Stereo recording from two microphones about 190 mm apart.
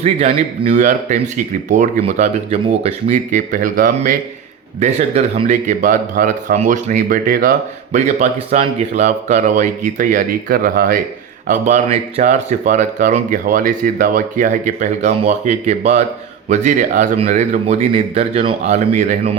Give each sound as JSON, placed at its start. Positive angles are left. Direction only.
{"t": 0.0, "sound": "speech", "side_deg": -30}
{"t": 4.8, "sound": "speech", "side_deg": -35}
{"t": 7.9, "sound": "speech", "side_deg": -35}